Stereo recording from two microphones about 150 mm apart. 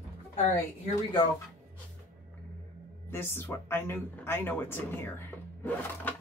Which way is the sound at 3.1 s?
15° left (ahead or behind).